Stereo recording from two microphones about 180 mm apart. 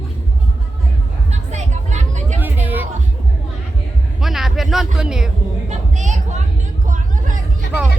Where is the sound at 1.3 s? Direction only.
40° right (ahead or behind).